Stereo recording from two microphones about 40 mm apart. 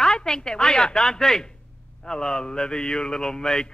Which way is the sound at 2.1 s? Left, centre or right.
Centre.